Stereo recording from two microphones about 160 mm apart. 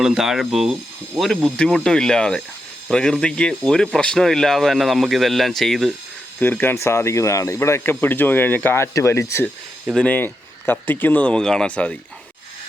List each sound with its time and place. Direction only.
0.0 s speech: 5° right (ahead or behind)
6.4 s speech: 10° left (ahead or behind)